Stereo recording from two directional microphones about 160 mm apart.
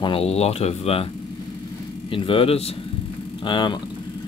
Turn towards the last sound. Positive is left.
turn(degrees=30)  # may be behind; listen again after turning